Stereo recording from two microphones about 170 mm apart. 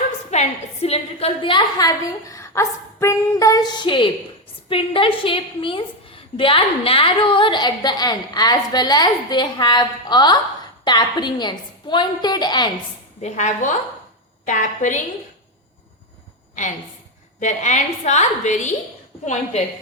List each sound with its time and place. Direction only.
0.3 s a woman's voice: 40° left (ahead or behind)
13.2 s a woman's voice: 45° left (ahead or behind)
17.4 s a woman's voice: 45° left (ahead or behind)